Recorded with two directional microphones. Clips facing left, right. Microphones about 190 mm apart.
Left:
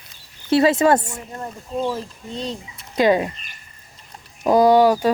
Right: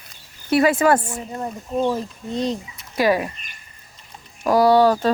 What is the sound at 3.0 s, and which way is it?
Speech, 20° left (ahead or behind).